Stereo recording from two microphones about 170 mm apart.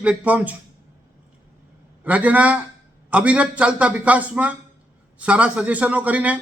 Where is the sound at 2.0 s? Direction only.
10° right (ahead or behind).